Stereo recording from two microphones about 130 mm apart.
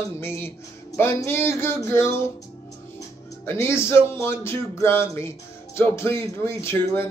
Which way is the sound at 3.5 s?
20° left (ahead or behind).